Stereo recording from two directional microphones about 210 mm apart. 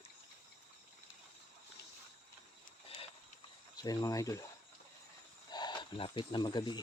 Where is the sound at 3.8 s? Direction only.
20° left (ahead or behind).